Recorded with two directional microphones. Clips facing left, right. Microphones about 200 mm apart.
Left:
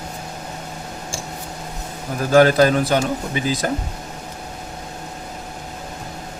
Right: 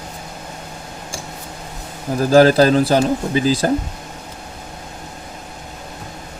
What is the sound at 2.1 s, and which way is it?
Speech, 35° right (ahead or behind).